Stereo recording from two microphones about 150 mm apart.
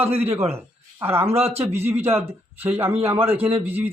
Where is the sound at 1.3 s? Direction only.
40° right (ahead or behind).